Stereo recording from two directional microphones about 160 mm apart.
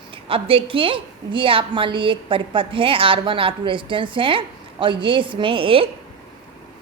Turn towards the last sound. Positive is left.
turn(degrees=-35)  # may be behind; listen again after turning